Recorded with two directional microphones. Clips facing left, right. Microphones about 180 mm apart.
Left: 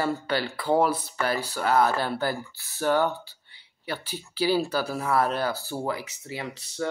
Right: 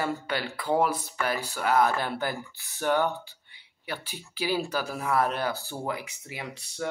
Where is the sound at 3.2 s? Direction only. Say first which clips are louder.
Right 1 dB; 35° left (ahead or behind).